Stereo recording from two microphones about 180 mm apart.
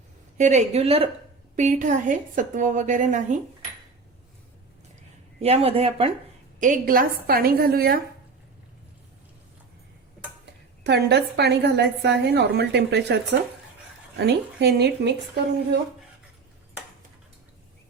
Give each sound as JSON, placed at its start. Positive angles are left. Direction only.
{"t": 0.3, "sound": "a woman's voice", "side_deg": -40}
{"t": 1.5, "sound": "a woman's voice", "side_deg": -45}
{"t": 5.4, "sound": "a woman's voice", "side_deg": -35}
{"t": 6.6, "sound": "a woman's voice", "side_deg": -50}
{"t": 10.8, "sound": "a woman's voice", "side_deg": -70}
{"t": 14.2, "sound": "a woman's voice", "side_deg": -65}